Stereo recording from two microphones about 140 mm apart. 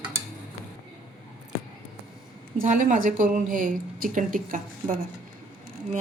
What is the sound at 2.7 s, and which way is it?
A woman's voice, 70° right (ahead or behind).